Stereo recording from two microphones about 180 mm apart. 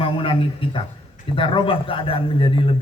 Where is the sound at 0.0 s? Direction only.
30° left (ahead or behind).